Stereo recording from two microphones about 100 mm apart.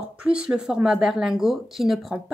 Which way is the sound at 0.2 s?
10° right (ahead or behind).